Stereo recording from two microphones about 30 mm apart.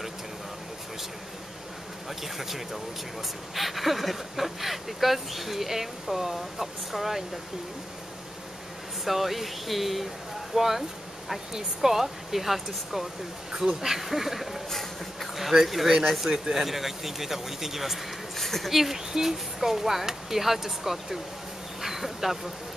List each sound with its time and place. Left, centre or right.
2.0 s speech: centre
9.0 s speech: centre
13.5 s speech: right
13.7 s speech: centre
14.7 s a sound: centre
15.3 s speech: centre
18.3 s speech: centre
18.7 s speech: centre